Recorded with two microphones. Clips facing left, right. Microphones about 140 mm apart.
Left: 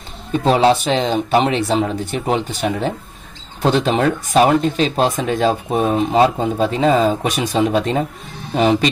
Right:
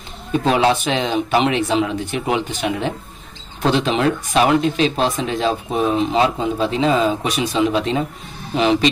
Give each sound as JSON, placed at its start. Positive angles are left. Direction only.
{"t": 0.5, "sound": "speech", "side_deg": 35}